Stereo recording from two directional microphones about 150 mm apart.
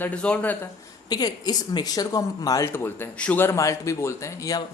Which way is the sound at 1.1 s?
25° left (ahead or behind).